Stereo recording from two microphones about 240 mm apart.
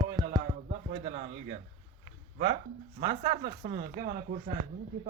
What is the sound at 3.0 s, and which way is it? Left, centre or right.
Speech, right.